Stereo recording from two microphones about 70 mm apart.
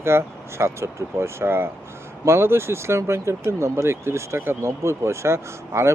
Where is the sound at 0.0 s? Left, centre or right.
Right.